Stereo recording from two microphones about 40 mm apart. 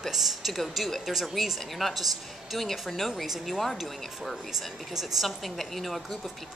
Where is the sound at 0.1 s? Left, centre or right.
Centre.